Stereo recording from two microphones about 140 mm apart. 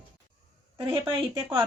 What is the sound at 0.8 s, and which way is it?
Speech, 20° right (ahead or behind).